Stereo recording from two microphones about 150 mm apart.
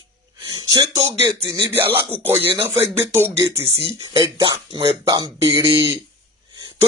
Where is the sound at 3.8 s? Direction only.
30° right (ahead or behind).